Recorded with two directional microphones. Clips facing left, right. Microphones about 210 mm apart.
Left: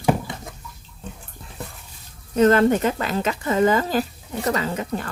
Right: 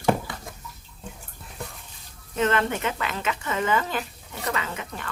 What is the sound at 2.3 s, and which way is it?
Speech, 40° left (ahead or behind).